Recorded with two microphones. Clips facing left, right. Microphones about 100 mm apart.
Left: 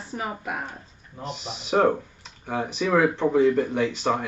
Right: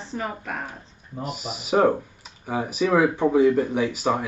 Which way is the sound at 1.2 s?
5° right (ahead or behind).